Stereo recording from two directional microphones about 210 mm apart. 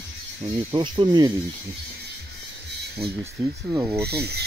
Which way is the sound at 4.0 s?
50° right (ahead or behind).